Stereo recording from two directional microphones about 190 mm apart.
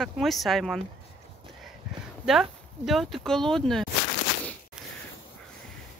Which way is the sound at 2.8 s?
Centre (ahead or behind).